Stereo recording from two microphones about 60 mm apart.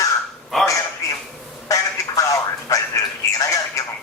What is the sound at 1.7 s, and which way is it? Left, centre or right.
Telephone, left.